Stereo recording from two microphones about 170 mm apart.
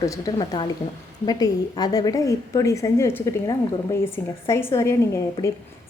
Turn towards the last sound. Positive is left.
turn(degrees=15)  # may be behind; listen again after turning